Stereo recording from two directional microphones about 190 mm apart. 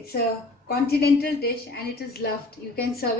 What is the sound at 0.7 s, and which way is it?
A woman's voice, 55° left (ahead or behind).